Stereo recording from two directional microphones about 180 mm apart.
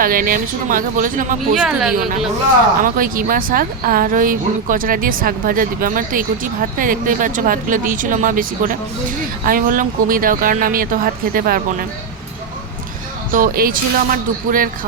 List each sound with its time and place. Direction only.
0.0 s speech: 50° right (ahead or behind)
1.6 s a woman's voice: centre (ahead or behind)
2.8 s speech: 50° right (ahead or behind)
13.3 s speech: 50° right (ahead or behind)